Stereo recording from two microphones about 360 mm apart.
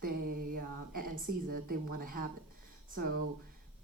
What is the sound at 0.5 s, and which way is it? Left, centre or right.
Speech, right.